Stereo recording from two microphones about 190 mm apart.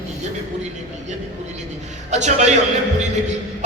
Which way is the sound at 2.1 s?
40° right (ahead or behind).